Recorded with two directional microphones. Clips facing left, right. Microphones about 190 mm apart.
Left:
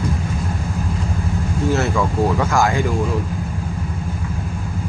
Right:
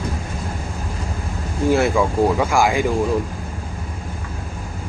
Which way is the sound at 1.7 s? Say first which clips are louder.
Right 4 dB; 10° right (ahead or behind).